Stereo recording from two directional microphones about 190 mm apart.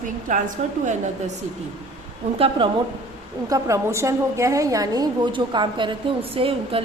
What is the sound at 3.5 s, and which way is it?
A woman's voice, 15° right (ahead or behind).